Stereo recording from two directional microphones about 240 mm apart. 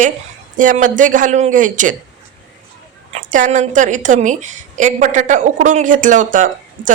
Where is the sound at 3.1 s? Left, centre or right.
Right.